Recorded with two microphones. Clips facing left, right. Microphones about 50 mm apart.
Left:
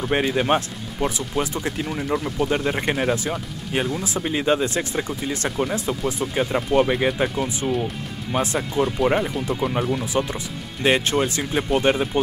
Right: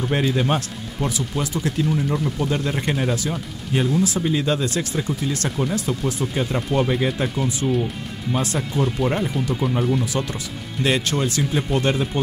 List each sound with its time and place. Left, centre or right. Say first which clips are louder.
0.1 s speech: left 2 dB; left
2.1 s speech: even; centre
2.4 s speech: left 1 dB; left
8.8 s speech: left 2 dB; centre